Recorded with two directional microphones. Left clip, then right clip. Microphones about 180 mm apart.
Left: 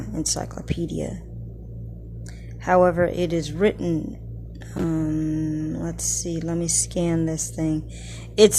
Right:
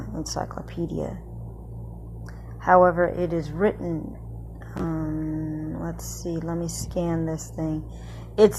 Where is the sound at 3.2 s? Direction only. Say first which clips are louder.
Left 2 dB; 25° left (ahead or behind).